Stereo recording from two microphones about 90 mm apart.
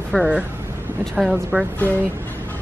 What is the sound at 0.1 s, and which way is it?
Speech, 10° left (ahead or behind).